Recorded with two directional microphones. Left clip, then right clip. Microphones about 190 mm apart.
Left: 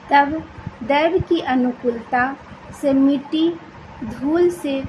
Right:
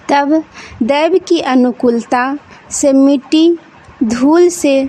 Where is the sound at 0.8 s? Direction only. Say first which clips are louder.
Right 6 dB; 65° right (ahead or behind).